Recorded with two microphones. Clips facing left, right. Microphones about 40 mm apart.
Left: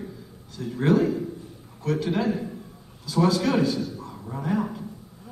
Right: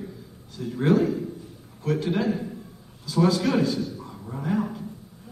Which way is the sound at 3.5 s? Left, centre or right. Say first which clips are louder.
Even; centre.